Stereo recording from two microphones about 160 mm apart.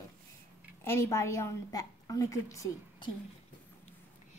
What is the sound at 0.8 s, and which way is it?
A woman's voice, 15° left (ahead or behind).